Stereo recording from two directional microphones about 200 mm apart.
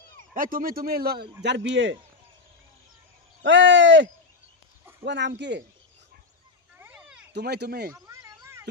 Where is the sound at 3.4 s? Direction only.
70° right (ahead or behind).